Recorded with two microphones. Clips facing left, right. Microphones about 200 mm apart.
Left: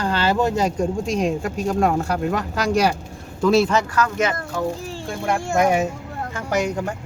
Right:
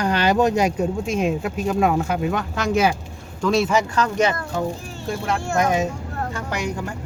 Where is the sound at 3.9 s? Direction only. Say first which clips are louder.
Right 1 dB; 30° right (ahead or behind).